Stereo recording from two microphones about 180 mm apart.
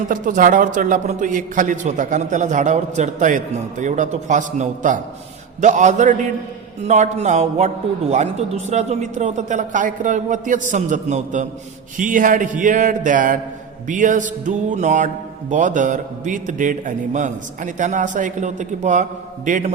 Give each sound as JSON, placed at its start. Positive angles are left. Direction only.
{"t": 0.1, "sound": "speech", "side_deg": -45}